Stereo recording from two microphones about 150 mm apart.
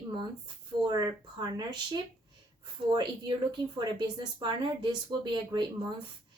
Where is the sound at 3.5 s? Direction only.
30° right (ahead or behind).